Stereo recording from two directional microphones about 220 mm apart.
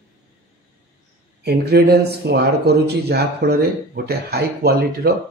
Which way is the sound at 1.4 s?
45° right (ahead or behind).